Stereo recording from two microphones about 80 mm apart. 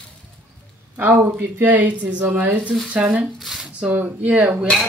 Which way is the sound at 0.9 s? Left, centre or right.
Right.